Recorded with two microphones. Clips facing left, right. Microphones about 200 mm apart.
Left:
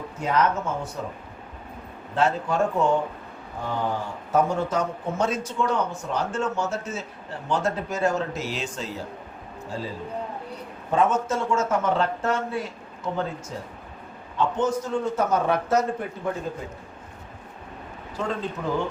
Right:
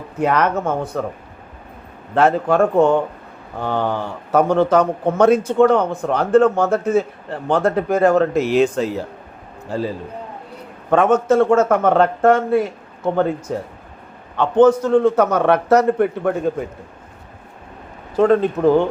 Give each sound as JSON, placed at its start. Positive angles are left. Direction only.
{"t": 0.2, "sound": "a man's voice", "side_deg": -65}
{"t": 2.1, "sound": "a man's voice", "side_deg": -60}
{"t": 3.6, "sound": "a man's voice", "side_deg": -75}
{"t": 10.9, "sound": "a man's voice", "side_deg": -65}
{"t": 14.3, "sound": "a man's voice", "side_deg": -60}
{"t": 18.2, "sound": "a man's voice", "side_deg": -60}